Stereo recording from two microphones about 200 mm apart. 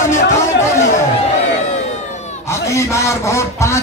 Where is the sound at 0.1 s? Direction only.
15° left (ahead or behind).